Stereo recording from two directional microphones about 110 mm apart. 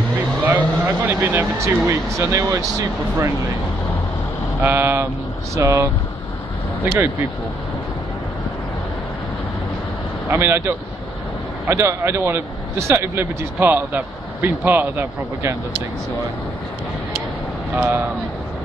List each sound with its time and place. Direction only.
0.5 s speech: 20° right (ahead or behind)
4.6 s a man's voice: 15° right (ahead or behind)
10.2 s a man's voice: 20° right (ahead or behind)
17.7 s a man's voice: 20° right (ahead or behind)